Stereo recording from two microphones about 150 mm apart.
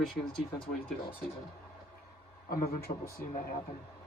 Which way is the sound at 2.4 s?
80° left.